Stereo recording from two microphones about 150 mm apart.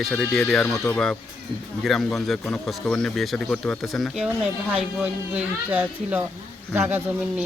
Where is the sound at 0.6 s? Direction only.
20° left (ahead or behind).